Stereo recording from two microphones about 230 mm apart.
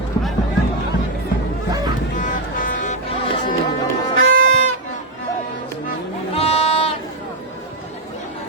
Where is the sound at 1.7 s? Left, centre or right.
Centre.